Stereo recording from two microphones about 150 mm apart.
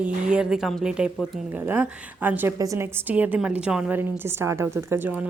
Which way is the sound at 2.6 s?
20° right (ahead or behind).